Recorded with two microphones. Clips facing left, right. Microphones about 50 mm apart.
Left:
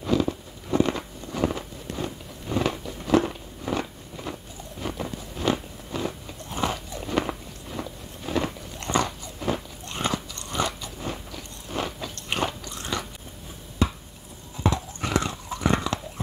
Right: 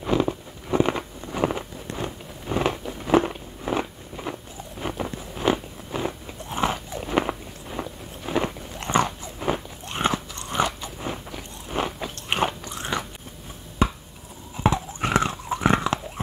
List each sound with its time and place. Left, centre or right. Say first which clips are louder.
0.0 s biting: right 1 dB; right
13.8 s chopping: right 2 dB; right
14.6 s chewing: right 3 dB; right